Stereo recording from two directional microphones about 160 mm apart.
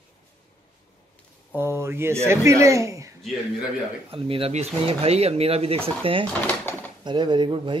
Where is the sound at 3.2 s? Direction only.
Centre (ahead or behind).